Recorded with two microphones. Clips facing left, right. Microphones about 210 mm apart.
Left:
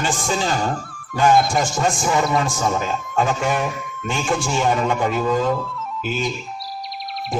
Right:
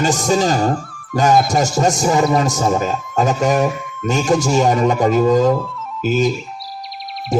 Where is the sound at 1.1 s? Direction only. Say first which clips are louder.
Right 2 dB; 40° right (ahead or behind).